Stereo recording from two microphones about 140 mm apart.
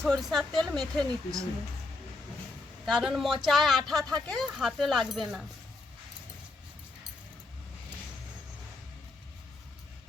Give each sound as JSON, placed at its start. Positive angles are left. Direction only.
{"t": 0.0, "sound": "a woman's voice", "side_deg": 0}
{"t": 2.8, "sound": "a woman's voice", "side_deg": 0}